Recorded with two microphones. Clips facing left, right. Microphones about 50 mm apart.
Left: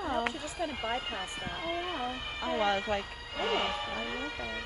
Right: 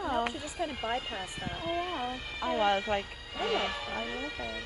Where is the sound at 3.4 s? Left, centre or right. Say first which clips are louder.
Even; left.